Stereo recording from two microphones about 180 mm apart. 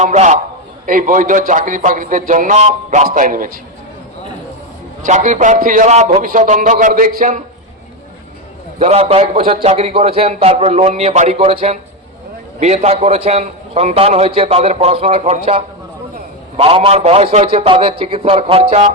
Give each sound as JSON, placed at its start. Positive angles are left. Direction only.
{"t": 0.0, "sound": "a man's voice", "side_deg": -40}
{"t": 5.0, "sound": "a man's voice", "side_deg": -45}
{"t": 8.8, "sound": "a man's voice", "side_deg": -35}